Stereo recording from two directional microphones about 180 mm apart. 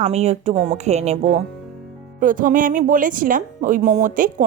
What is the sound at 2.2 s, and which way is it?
A woman's voice, 50° right (ahead or behind).